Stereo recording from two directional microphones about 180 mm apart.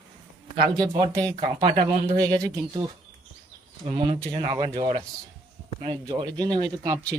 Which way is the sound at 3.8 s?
25° right (ahead or behind).